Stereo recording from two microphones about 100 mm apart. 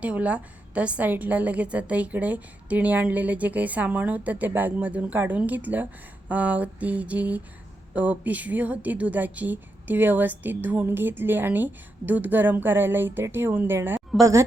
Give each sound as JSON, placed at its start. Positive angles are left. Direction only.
{"t": 0.0, "sound": "a woman's voice", "side_deg": -15}
{"t": 14.2, "sound": "speech", "side_deg": -35}